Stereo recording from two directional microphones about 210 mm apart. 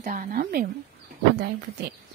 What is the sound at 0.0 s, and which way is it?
Speech, 40° right (ahead or behind).